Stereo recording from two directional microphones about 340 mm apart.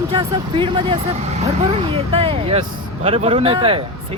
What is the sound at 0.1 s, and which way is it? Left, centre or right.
Speech, centre.